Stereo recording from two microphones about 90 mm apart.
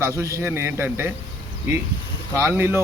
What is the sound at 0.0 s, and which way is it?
A man's voice, 35° right (ahead or behind).